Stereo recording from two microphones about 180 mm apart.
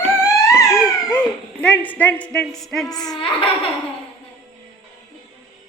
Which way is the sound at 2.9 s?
20° left (ahead or behind).